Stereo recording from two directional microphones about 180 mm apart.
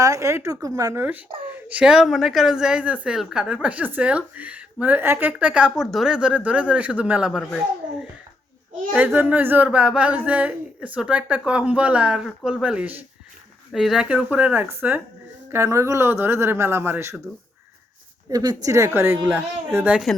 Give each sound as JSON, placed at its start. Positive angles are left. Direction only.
{"t": 0.0, "sound": "speech", "side_deg": -15}
{"t": 1.5, "sound": "speech", "side_deg": -5}
{"t": 8.9, "sound": "speech", "side_deg": -5}
{"t": 18.3, "sound": "speech", "side_deg": -20}